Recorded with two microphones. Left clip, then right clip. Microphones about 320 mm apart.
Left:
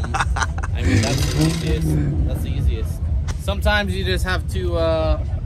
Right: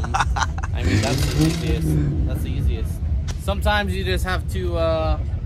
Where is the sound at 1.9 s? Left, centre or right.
Centre.